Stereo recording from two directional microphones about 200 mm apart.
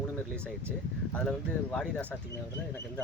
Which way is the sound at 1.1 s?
5° left (ahead or behind).